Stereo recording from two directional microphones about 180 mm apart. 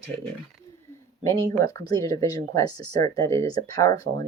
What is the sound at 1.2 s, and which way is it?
Speech, 15° left (ahead or behind).